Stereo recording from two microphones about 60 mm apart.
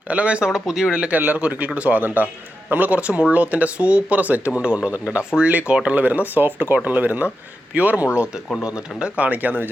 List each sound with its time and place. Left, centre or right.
0.1 s speech: centre